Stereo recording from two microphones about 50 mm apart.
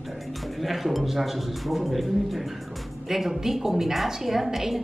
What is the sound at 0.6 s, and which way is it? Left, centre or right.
A woman's voice, centre.